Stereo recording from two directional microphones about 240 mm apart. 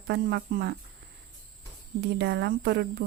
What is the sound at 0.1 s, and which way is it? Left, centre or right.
Speech, right.